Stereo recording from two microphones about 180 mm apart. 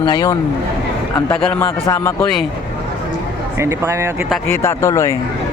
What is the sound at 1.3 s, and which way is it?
Speech, 10° left (ahead or behind).